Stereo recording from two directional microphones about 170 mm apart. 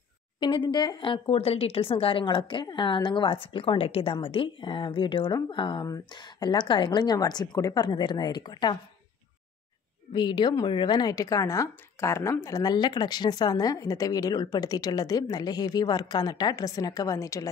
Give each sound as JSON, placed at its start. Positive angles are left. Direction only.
{"t": 0.4, "sound": "speech", "side_deg": 25}
{"t": 10.1, "sound": "speech", "side_deg": 25}